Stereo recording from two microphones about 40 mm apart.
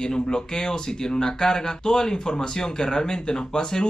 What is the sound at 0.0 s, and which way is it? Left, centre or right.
Speech, centre.